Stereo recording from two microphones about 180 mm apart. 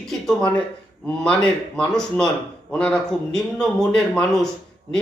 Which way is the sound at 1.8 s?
5° left (ahead or behind).